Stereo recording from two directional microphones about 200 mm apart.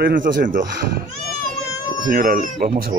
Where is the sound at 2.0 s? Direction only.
45° right (ahead or behind).